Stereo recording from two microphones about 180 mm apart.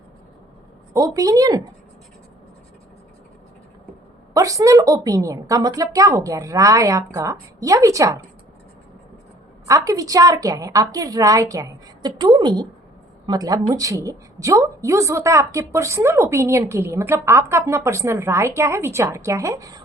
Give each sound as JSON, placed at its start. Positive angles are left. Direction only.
{"t": 0.9, "sound": "a woman's voice", "side_deg": -20}
{"t": 4.4, "sound": "a woman's voice", "side_deg": -20}
{"t": 9.6, "sound": "a woman's voice", "side_deg": -20}